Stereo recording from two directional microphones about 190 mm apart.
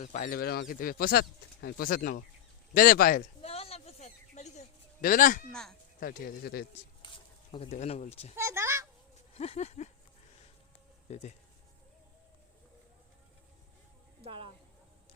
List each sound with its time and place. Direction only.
0.0 s speech: 40° left (ahead or behind)
3.4 s a sound: 30° left (ahead or behind)
5.5 s speech: 5° left (ahead or behind)
6.0 s speech: 50° left (ahead or behind)
7.5 s speech: 30° left (ahead or behind)
8.4 s a sound: 15° right (ahead or behind)
9.3 s a sound: 35° left (ahead or behind)
11.1 s speech: 35° left (ahead or behind)
14.2 s speech: 30° right (ahead or behind)